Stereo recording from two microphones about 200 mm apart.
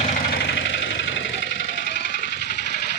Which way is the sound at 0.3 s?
60° left (ahead or behind).